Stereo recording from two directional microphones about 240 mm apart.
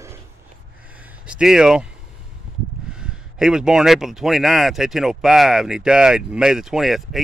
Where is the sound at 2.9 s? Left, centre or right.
Centre.